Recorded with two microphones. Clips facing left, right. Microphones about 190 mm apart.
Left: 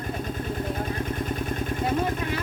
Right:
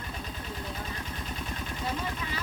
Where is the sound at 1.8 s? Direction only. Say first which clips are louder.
Left 8 dB; 60° left (ahead or behind).